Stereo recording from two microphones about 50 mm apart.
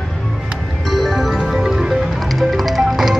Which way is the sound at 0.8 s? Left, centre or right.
Centre.